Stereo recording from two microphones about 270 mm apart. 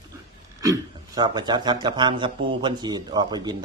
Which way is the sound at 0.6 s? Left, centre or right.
Centre.